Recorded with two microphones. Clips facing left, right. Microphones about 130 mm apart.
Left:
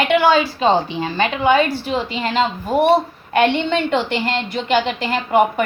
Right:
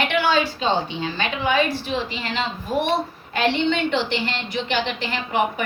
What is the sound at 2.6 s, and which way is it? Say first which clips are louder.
Speech: left 4 dB; 45° left (ahead or behind).